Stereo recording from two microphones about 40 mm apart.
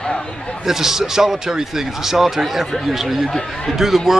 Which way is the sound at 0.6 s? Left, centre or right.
Centre.